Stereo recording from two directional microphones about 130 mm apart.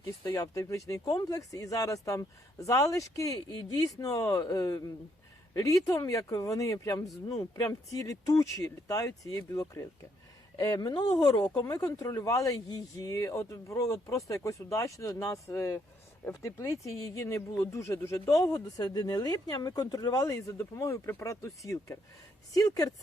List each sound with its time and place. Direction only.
0.3 s speech: 25° left (ahead or behind)
5.9 s speech: 25° left (ahead or behind)